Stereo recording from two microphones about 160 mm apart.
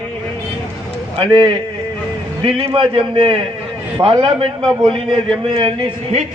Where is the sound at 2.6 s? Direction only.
30° right (ahead or behind).